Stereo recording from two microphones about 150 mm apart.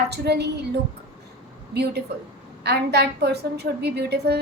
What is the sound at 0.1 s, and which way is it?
Speech, 90° right.